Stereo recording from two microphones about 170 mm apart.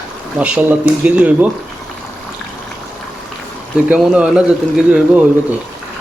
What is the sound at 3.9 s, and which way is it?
Speech, 5° right (ahead or behind).